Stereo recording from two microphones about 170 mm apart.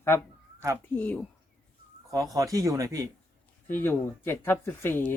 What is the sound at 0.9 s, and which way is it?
Speech, 10° left (ahead or behind).